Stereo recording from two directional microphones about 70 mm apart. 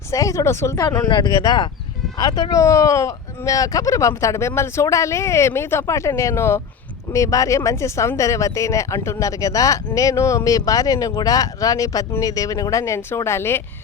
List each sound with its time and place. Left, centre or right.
0.1 s speech: left
1.0 s speech: left